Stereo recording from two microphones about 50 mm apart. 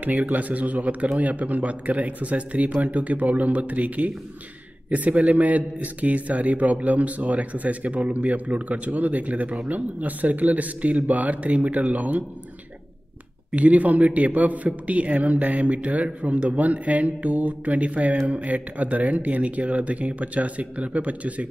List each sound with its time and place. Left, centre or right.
0.0 s a man's voice: right
13.5 s a man's voice: right